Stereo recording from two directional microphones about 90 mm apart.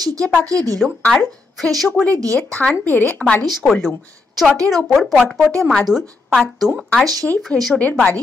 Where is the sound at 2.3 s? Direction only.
10° left (ahead or behind).